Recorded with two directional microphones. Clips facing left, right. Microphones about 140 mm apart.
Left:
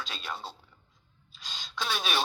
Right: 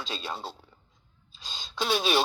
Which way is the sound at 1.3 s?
25° right (ahead or behind).